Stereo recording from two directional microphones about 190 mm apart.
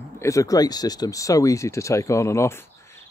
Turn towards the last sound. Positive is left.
turn(degrees=15)  # may be behind; listen again after turning